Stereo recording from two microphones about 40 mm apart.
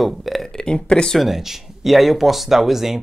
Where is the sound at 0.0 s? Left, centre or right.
Centre.